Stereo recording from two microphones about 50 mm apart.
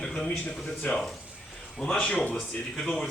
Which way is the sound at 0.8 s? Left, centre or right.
Left.